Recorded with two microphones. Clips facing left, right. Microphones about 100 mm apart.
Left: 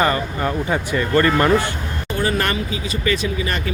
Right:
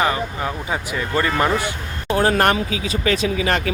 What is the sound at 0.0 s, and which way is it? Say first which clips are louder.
Speech: left 2 dB; 5° right (ahead or behind).